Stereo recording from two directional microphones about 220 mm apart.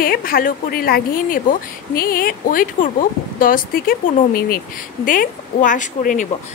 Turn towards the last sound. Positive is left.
turn(degrees=35)  # may be behind; listen again after turning